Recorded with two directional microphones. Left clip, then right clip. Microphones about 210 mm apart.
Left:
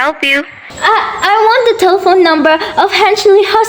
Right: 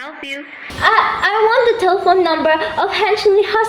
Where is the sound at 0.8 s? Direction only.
35° left (ahead or behind).